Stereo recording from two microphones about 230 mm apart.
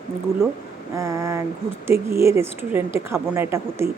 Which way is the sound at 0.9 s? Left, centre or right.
Centre.